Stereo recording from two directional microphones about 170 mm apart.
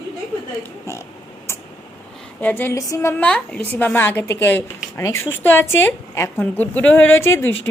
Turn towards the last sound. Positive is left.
turn(degrees=15)  # may be behind; listen again after turning